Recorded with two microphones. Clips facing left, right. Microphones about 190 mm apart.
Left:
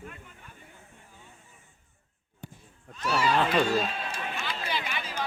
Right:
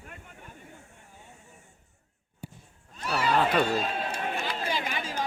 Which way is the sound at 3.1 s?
55° right (ahead or behind).